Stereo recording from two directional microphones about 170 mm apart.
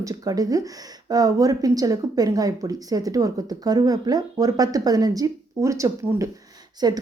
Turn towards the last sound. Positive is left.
turn(degrees=-25)  # may be behind; listen again after turning